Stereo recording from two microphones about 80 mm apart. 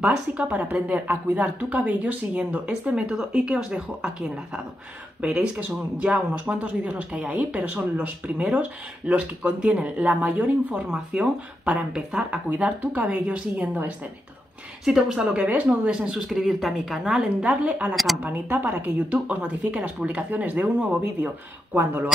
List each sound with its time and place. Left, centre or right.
0.0 s speech: centre
5.2 s a woman's voice: centre
17.9 s a woman's voice: centre
18.2 s a woman's voice: right